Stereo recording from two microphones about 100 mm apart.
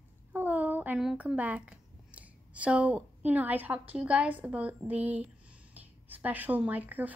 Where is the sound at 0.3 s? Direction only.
15° right (ahead or behind).